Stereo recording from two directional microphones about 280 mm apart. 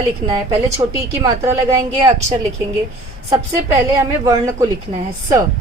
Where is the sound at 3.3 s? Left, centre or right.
Centre.